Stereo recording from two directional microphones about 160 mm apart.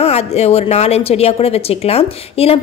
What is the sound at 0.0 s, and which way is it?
A woman's voice, 40° left (ahead or behind).